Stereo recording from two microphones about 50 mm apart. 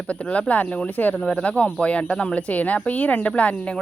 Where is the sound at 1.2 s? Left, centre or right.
Centre.